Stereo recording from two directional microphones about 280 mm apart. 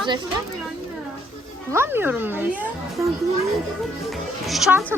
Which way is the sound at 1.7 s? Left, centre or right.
Centre.